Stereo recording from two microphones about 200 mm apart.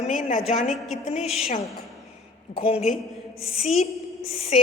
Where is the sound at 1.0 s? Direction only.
35° left (ahead or behind).